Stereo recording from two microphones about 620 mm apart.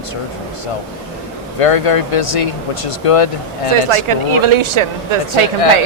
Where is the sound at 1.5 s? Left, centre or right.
Left.